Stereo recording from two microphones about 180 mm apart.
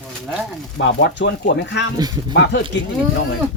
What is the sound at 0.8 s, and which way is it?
Speech, 80° left.